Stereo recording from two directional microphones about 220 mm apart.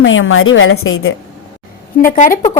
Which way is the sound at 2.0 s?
40° left (ahead or behind).